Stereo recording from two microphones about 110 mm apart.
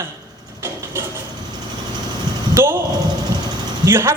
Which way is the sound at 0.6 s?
25° right (ahead or behind).